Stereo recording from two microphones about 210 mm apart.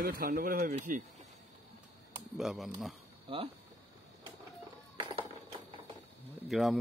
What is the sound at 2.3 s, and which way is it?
Speech, centre (ahead or behind).